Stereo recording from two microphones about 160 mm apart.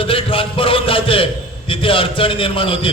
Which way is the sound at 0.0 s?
35° left (ahead or behind).